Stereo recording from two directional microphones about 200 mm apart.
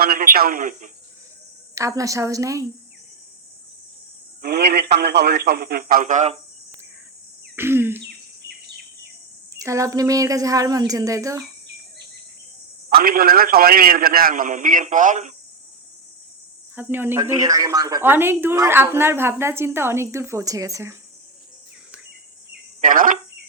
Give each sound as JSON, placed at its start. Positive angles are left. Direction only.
{"t": 0.0, "sound": "a man's voice", "side_deg": -45}
{"t": 1.7, "sound": "a woman's voice", "side_deg": -15}
{"t": 4.4, "sound": "a man's voice", "side_deg": -50}
{"t": 7.5, "sound": "a woman's voice", "side_deg": -10}
{"t": 8.0, "sound": "bird vocalization", "side_deg": -55}
{"t": 9.6, "sound": "a woman's voice", "side_deg": -15}
{"t": 12.9, "sound": "a man's voice", "side_deg": -50}
{"t": 16.7, "sound": "a woman's voice", "side_deg": -10}
{"t": 22.8, "sound": "speech", "side_deg": -40}